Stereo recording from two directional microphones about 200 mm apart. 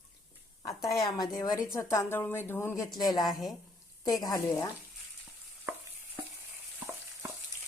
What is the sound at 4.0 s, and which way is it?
Speech, 20° left (ahead or behind).